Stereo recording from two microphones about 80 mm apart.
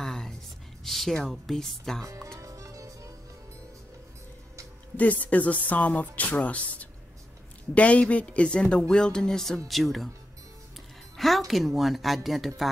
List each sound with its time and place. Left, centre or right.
0.0 s gasp: centre
0.8 s speech: centre
2.3 s music: right
4.9 s speech: centre
11.1 s speech: centre